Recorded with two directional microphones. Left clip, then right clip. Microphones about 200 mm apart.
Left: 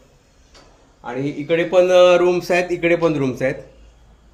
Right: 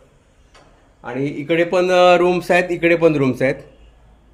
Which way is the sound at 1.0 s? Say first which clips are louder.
Right 1 dB; 55° right (ahead or behind).